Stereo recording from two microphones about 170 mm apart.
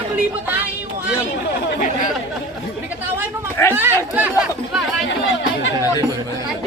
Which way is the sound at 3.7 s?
15° right (ahead or behind).